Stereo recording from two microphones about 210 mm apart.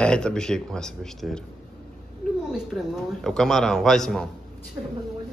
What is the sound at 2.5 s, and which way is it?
A man's voice, centre (ahead or behind).